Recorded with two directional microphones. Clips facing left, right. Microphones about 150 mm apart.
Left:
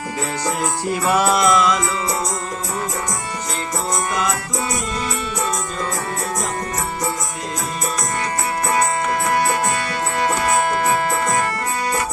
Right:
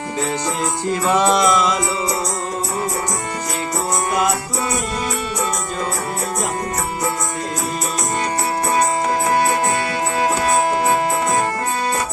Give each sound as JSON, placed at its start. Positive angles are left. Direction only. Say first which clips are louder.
{"t": 0.9, "sound": "music", "louder": "right 2 dB", "side_deg": 10}
{"t": 10.4, "sound": "music", "louder": "right 1 dB", "side_deg": -30}